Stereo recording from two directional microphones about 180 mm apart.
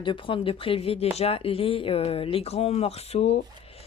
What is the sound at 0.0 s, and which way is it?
Speech, 30° left (ahead or behind).